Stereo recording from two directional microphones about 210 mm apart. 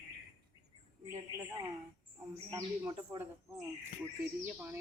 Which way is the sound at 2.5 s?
15° right (ahead or behind).